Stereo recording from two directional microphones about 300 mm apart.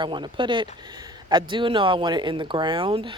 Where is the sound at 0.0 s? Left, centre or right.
Centre.